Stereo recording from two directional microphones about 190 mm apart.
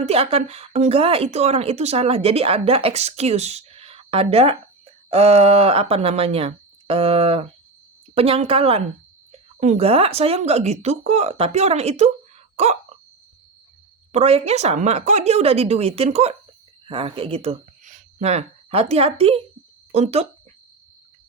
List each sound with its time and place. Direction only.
0.0 s a woman's voice: 30° right (ahead or behind)
12.5 s a sound: 35° right (ahead or behind)
14.1 s a woman's voice: 30° right (ahead or behind)